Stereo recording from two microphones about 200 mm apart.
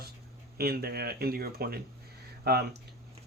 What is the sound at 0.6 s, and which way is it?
Speech, 50° right (ahead or behind).